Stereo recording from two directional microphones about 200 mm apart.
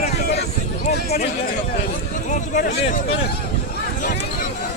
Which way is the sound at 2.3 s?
40° left (ahead or behind).